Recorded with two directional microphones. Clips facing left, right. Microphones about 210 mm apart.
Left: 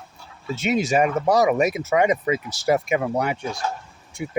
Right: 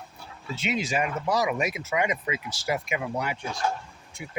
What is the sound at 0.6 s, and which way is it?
Speech, 45° left (ahead or behind).